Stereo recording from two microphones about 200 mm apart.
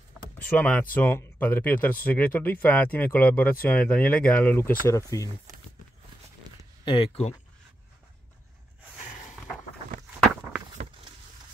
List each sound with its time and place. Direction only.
0.6 s speech: 5° left (ahead or behind)
6.5 s a sound: 20° right (ahead or behind)
6.8 s speech: 25° left (ahead or behind)